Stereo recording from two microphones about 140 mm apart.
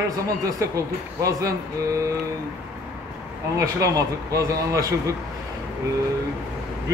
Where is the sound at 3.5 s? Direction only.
25° right (ahead or behind).